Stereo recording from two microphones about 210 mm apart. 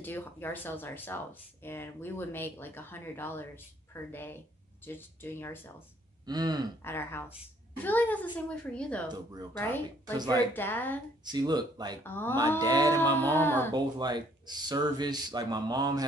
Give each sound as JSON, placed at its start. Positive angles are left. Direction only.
{"t": 0.0, "sound": "speech", "side_deg": 10}
{"t": 6.2, "sound": "speech", "side_deg": -20}
{"t": 6.8, "sound": "speech", "side_deg": 10}
{"t": 9.1, "sound": "speech", "side_deg": -20}
{"t": 9.5, "sound": "speech", "side_deg": 10}
{"t": 10.1, "sound": "speech", "side_deg": -20}
{"t": 10.5, "sound": "speech", "side_deg": 10}
{"t": 11.3, "sound": "speech", "side_deg": -20}
{"t": 12.0, "sound": "speech", "side_deg": 10}
{"t": 12.4, "sound": "speech", "side_deg": -20}
{"t": 13.1, "sound": "speech", "side_deg": 10}
{"t": 13.7, "sound": "speech", "side_deg": -20}